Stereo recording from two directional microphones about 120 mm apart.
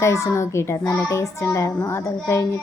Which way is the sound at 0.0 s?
25° left (ahead or behind).